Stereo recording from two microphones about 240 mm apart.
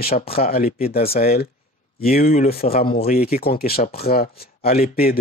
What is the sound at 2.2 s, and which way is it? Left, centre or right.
Speech, left.